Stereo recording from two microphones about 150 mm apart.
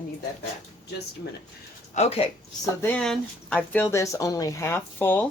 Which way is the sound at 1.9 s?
45° left (ahead or behind).